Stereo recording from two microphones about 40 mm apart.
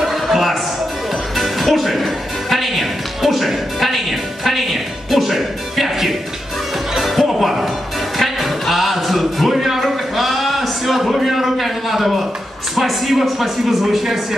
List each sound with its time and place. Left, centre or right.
0.0 s a sound: centre
1.3 s music: centre
12.7 s speech: centre